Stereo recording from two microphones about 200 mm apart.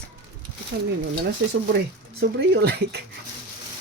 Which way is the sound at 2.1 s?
50° right (ahead or behind).